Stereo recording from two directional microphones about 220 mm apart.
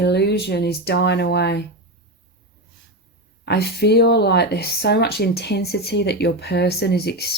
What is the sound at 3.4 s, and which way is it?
Speech, 50° left (ahead or behind).